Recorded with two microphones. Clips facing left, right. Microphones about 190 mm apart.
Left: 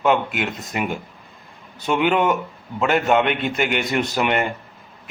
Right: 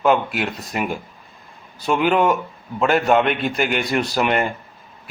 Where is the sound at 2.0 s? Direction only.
35° right (ahead or behind).